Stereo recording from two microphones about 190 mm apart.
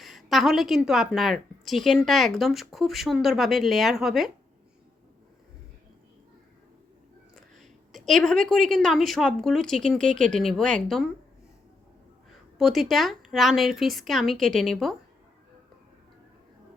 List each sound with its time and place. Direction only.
0.0 s a woman's voice: centre (ahead or behind)
7.3 s a woman's voice: centre (ahead or behind)
12.5 s a woman's voice: centre (ahead or behind)